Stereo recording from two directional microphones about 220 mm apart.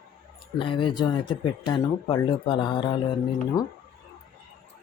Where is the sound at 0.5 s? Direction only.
25° left (ahead or behind).